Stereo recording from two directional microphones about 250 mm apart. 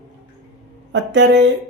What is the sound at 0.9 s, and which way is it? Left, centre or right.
Speech, right.